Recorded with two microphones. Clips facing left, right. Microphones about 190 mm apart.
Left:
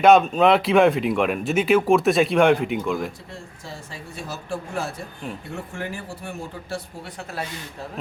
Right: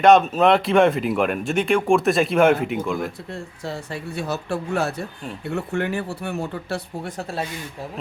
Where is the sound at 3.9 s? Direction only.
65° right (ahead or behind).